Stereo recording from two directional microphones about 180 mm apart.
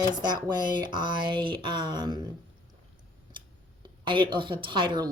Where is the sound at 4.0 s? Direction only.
25° right (ahead or behind).